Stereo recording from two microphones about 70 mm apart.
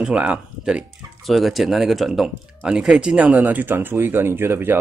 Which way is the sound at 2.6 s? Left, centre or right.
Centre.